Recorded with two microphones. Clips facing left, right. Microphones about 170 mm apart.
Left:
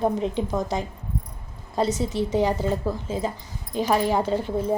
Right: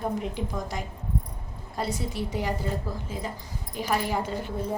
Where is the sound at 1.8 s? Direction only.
20° left (ahead or behind).